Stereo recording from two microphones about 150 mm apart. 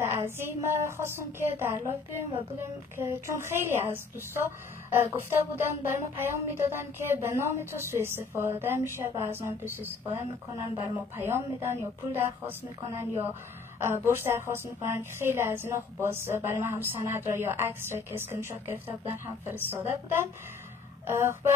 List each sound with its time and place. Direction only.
0.0 s a woman's voice: 15° right (ahead or behind)
11.1 s a woman's voice: 15° right (ahead or behind)